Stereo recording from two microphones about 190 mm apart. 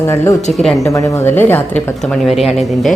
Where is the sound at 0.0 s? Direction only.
15° left (ahead or behind).